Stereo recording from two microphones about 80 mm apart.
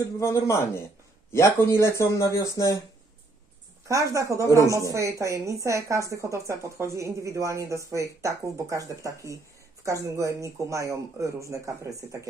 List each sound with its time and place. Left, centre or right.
0.2 s speech: left
3.8 s a woman's voice: right